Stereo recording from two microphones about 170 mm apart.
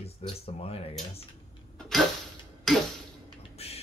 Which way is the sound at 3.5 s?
35° left (ahead or behind).